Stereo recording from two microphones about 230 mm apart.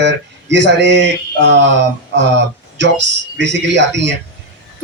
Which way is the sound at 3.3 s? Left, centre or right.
Right.